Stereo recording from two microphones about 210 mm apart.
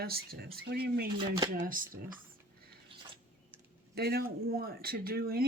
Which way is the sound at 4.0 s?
45° right (ahead or behind).